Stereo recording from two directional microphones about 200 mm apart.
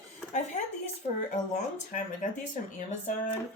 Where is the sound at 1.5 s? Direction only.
40° left (ahead or behind).